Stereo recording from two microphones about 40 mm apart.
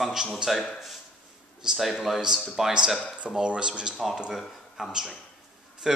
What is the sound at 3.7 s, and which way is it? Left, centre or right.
A man's voice, centre.